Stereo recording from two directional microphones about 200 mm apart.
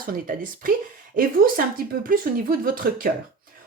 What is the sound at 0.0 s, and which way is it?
Speech, 45° right (ahead or behind).